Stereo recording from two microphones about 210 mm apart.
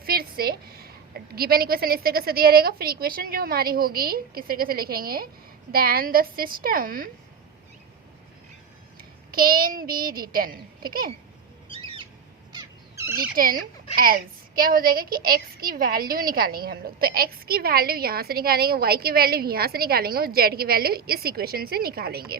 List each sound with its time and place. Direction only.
0.0 s a woman's voice: 45° right (ahead or behind)
9.0 s a child's voice: 45° right (ahead or behind)
11.7 s bird: 25° right (ahead or behind)
12.5 s a sound: 15° right (ahead or behind)
13.3 s fowl: 40° right (ahead or behind)
13.9 s a woman's voice: 45° right (ahead or behind)